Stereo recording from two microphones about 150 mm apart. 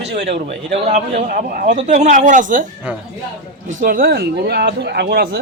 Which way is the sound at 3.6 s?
70° right (ahead or behind).